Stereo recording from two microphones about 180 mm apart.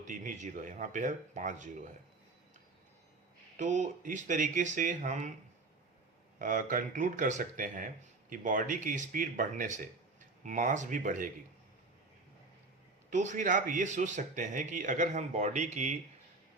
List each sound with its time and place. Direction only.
0.1 s speech: 45° right (ahead or behind)
3.6 s speech: 45° right (ahead or behind)
6.4 s speech: 50° right (ahead or behind)
13.1 s speech: 45° right (ahead or behind)